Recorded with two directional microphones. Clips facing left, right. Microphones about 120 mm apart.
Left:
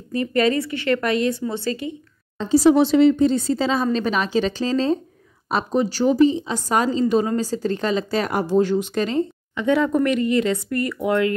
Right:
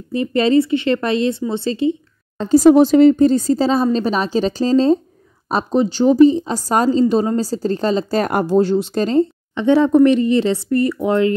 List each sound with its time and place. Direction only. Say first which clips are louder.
0.1 s speech: right 5 dB; 20° right (ahead or behind)
2.3 s speech: right 5 dB; 50° right (ahead or behind); by 6.1 s 25° right (ahead or behind)
6.1 s speech: right 6 dB; 40° right (ahead or behind)
8.5 s speech: right 3 dB; 35° right (ahead or behind)